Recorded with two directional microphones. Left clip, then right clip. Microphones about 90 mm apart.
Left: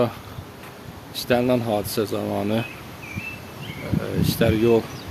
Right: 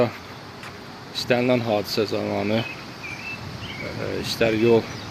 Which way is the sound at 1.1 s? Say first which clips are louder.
Even; 35° left (ahead or behind).